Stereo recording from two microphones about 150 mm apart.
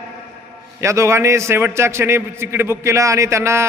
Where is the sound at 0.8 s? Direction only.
20° right (ahead or behind).